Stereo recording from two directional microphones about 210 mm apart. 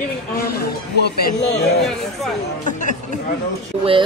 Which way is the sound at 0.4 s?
45° left (ahead or behind).